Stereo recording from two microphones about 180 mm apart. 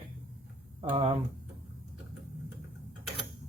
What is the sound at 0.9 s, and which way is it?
Cutlery, 30° right (ahead or behind).